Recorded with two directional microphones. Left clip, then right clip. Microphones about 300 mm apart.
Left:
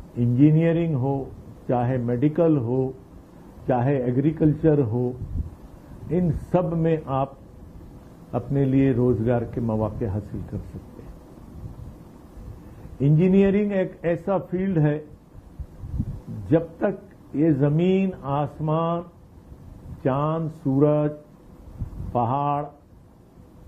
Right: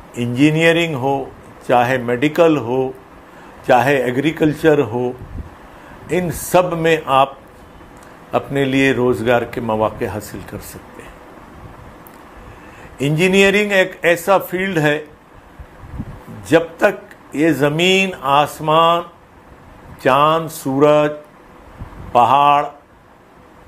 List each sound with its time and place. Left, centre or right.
0.2 s a man's voice: centre
1.0 s mantra: right
1.7 s a man's voice: centre
2.6 s speech: right
3.6 s a man's voice: centre
6.0 s a man's voice: centre
8.3 s a man's voice: centre
13.2 s a man's voice: centre
16.4 s a man's voice: centre
20.4 s mantra: right
20.8 s a man's voice: centre
22.2 s a man's voice: centre